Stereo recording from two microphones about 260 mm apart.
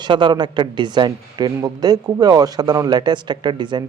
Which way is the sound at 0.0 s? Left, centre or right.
Centre.